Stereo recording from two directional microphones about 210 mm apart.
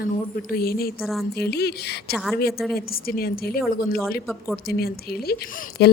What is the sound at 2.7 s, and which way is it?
Speech, 45° left (ahead or behind).